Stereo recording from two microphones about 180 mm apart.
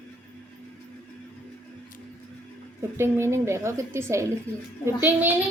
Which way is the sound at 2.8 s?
15° right (ahead or behind).